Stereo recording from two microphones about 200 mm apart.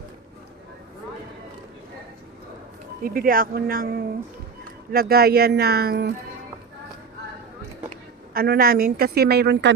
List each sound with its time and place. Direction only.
3.0 s a woman's voice: 45° right (ahead or behind)
8.3 s a woman's voice: 50° right (ahead or behind)